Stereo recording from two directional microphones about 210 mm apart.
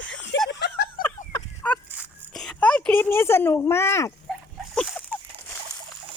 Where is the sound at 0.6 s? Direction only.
50° left (ahead or behind).